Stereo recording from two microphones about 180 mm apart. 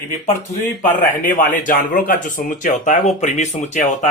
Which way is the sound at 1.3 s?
50° left (ahead or behind).